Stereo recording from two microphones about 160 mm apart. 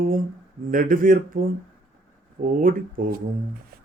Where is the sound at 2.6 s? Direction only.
60° right (ahead or behind).